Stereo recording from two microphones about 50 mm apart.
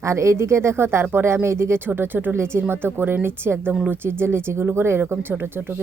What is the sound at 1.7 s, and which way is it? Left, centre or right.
Speech, right.